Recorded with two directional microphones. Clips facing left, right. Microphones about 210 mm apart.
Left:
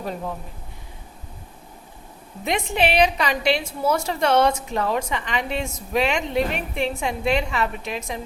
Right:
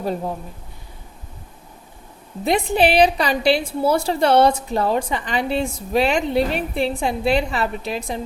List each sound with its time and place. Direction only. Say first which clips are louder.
2.4 s a woman's voice: right 5 dB; 35° right (ahead or behind)